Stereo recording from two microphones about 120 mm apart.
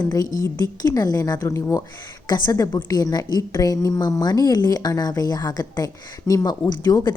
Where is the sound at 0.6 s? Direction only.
30° left (ahead or behind).